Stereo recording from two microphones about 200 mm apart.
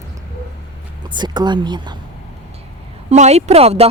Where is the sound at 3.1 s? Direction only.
35° right (ahead or behind).